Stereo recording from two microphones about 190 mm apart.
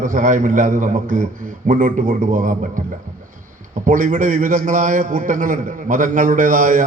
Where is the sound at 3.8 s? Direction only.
45° right (ahead or behind).